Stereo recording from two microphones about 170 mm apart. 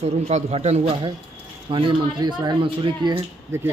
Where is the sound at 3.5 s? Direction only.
15° right (ahead or behind).